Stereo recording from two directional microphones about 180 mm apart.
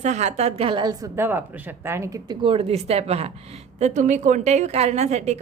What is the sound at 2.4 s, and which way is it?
A woman's voice, 30° right (ahead or behind).